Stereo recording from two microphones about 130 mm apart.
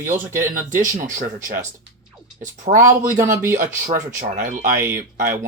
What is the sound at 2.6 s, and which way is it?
Speech, 60° right (ahead or behind).